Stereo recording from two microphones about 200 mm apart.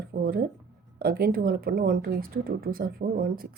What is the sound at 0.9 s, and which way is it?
Speech, 45° right (ahead or behind).